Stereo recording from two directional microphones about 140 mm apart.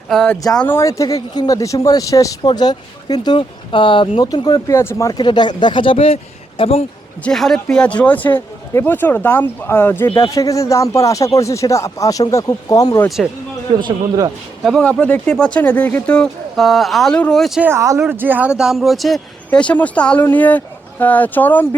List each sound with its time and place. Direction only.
0.1 s speech: 5° left (ahead or behind)
0.8 s speech: 25° left (ahead or behind)
5.2 s speech: 30° left (ahead or behind)
7.3 s speech: 5° left (ahead or behind); by 13.0 s 25° left (ahead or behind)
13.2 s speech: centre (ahead or behind)
13.7 s a man's voice: 30° right (ahead or behind)
14.6 s speech: 5° left (ahead or behind)
17.6 s speech: 20° right (ahead or behind); by 21.8 s 15° left (ahead or behind)